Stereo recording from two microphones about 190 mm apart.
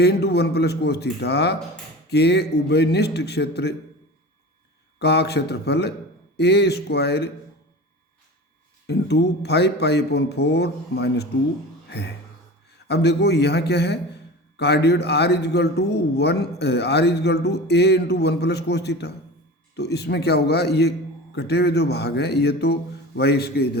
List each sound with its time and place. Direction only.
0.0 s speech: 60° left (ahead or behind)
4.9 s speech: 60° left (ahead or behind)
8.9 s speech: 60° left (ahead or behind)
11.9 s music: 60° left (ahead or behind)
12.9 s speech: 60° left (ahead or behind)